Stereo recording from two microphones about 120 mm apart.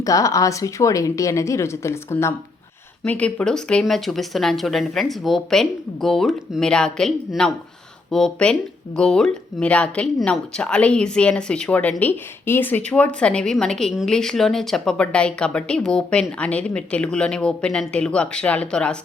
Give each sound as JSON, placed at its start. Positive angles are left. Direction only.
{"t": 0.0, "sound": "speech", "side_deg": 30}
{"t": 3.0, "sound": "speech", "side_deg": 10}